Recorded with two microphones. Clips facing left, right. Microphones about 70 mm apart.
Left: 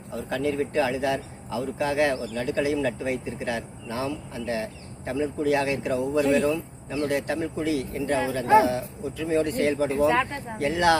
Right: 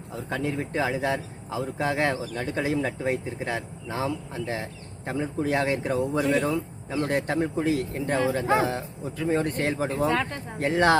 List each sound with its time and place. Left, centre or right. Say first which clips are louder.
0.3 s speech: left 3 dB; right
6.1 s speech: left 4 dB; centre
7.1 s speech: right 3 dB; right
10.1 s speech: left 3 dB; centre
10.6 s speech: even; right